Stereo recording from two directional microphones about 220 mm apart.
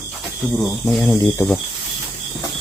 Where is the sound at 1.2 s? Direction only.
15° left (ahead or behind).